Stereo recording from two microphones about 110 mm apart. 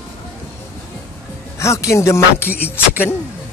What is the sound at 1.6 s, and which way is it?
Speech, 25° left (ahead or behind).